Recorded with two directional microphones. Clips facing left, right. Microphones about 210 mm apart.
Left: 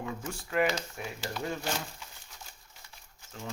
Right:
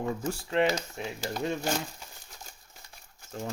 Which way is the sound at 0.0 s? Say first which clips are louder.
Right 6 dB; 40° right (ahead or behind).